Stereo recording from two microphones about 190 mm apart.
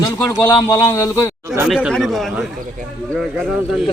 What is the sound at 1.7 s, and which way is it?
Speech, centre (ahead or behind).